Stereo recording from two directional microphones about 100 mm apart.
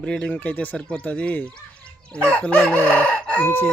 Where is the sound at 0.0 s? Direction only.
10° left (ahead or behind).